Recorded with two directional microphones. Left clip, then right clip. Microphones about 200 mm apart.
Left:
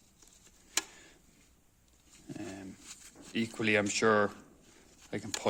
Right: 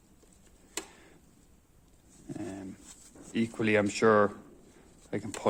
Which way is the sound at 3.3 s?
10° left (ahead or behind).